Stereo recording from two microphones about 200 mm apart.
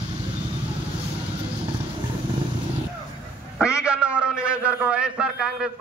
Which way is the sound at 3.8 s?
5° right (ahead or behind).